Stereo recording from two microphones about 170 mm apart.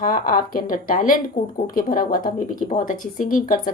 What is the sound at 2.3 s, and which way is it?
A woman's voice, 55° left (ahead or behind).